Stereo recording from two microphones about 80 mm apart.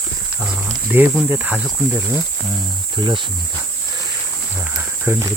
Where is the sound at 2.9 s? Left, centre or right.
Right.